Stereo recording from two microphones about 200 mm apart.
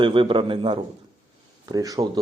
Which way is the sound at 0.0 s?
25° right (ahead or behind).